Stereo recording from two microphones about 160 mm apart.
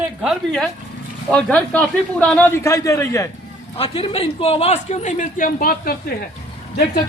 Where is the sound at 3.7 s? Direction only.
35° left (ahead or behind); by 5.9 s 65° left (ahead or behind).